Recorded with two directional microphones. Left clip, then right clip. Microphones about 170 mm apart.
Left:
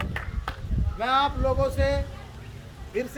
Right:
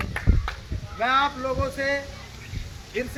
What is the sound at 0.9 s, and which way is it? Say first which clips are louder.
Speech: right 2 dB; 65° left (ahead or behind).